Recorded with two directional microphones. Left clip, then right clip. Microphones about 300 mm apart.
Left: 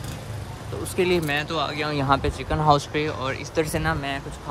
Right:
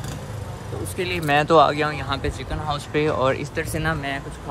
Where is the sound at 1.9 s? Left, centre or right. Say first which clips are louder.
Left 5 dB; centre.